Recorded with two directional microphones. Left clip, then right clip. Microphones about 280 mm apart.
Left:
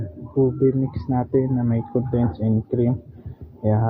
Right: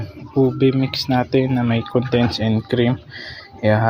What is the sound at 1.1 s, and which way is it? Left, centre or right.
Speech, right.